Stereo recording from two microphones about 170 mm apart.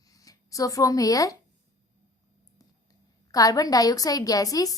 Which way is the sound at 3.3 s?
20° left (ahead or behind).